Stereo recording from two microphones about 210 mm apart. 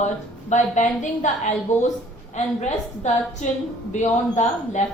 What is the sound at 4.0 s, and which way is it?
Speech, 35° left (ahead or behind).